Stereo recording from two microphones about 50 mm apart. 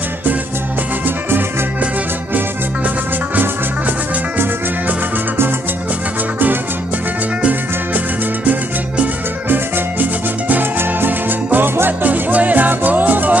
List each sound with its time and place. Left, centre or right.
8.5 s music: right
12.1 s music: right